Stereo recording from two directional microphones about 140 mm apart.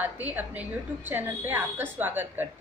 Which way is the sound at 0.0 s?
10° right (ahead or behind).